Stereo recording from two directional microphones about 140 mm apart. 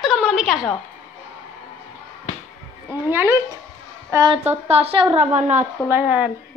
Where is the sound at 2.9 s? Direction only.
15° right (ahead or behind).